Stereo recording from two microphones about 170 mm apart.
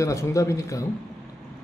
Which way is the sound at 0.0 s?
20° left (ahead or behind).